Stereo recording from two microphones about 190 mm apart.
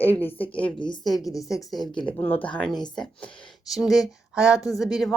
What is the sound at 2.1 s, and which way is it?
A woman's voice, 10° left (ahead or behind).